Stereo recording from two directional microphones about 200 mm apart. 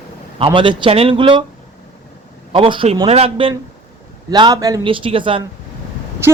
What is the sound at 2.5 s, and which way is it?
Speech, 25° right (ahead or behind).